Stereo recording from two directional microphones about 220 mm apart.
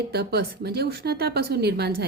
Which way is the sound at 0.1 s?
45° right (ahead or behind).